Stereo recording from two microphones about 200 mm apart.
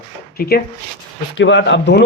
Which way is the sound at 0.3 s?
50° left (ahead or behind).